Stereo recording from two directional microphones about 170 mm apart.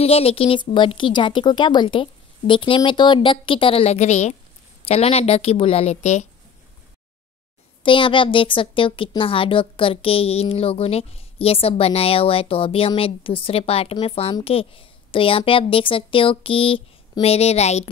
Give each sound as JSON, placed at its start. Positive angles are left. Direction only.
{"t": 0.0, "sound": "a woman's voice", "side_deg": 35}
{"t": 7.8, "sound": "speech", "side_deg": 30}